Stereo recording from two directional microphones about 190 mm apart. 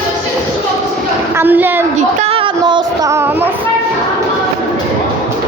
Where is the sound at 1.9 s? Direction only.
30° right (ahead or behind); by 3.4 s 10° right (ahead or behind).